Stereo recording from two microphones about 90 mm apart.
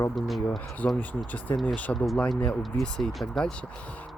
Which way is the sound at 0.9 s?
20° left (ahead or behind).